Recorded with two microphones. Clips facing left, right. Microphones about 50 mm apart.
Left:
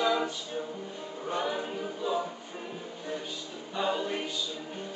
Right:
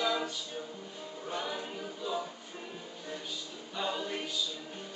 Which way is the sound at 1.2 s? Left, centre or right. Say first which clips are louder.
Left 6 dB; centre.